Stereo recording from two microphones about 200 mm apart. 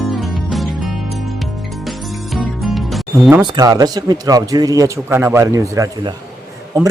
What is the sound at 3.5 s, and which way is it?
A man's voice, 20° right (ahead or behind).